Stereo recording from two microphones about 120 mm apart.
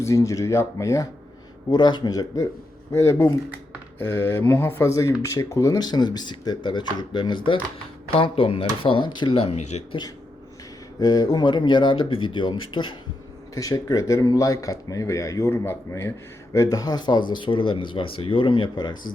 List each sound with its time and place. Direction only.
0.0 s speech: 25° left (ahead or behind)
1.7 s speech: 35° left (ahead or behind); by 9.8 s 65° left (ahead or behind)
11.0 s speech: 35° left (ahead or behind)
13.5 s speech: 30° left (ahead or behind)